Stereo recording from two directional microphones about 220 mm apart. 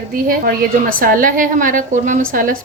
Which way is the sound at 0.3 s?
40° right (ahead or behind).